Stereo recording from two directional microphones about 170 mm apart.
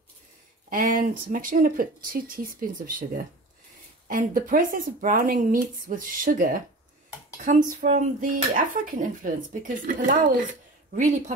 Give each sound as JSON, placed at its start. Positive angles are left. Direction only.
{"t": 0.7, "sound": "speech", "side_deg": -50}
{"t": 4.1, "sound": "speech", "side_deg": -55}